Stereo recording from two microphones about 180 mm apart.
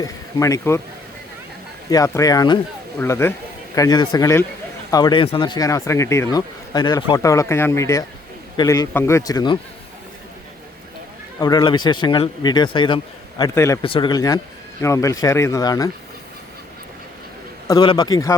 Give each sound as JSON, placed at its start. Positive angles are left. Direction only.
{"t": 0.0, "sound": "speech", "side_deg": 20}
{"t": 1.9, "sound": "speech", "side_deg": 20}
{"t": 11.3, "sound": "speech", "side_deg": 20}
{"t": 13.4, "sound": "speech", "side_deg": 15}
{"t": 13.8, "sound": "speech", "side_deg": 30}
{"t": 17.7, "sound": "speech", "side_deg": 25}